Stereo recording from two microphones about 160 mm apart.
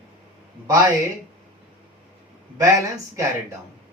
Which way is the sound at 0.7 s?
25° right (ahead or behind).